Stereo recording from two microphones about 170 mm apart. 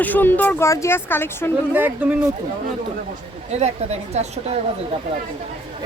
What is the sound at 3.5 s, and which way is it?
A woman's voice, 40° right (ahead or behind).